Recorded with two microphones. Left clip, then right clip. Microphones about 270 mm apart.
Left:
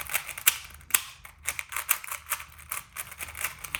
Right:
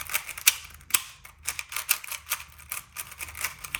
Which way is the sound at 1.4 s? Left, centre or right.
Centre.